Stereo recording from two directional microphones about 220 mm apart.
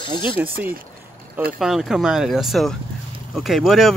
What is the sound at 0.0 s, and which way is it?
Speech, 20° left (ahead or behind).